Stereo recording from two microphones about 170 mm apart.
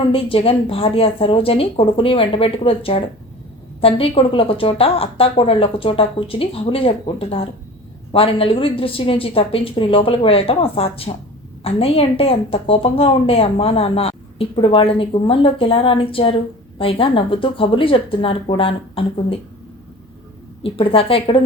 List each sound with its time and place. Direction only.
0.1 s a woman's voice: 35° left (ahead or behind)
20.6 s a woman's voice: 35° left (ahead or behind)